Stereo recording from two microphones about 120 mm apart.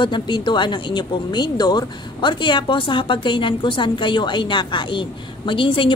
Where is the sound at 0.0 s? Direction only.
40° left (ahead or behind).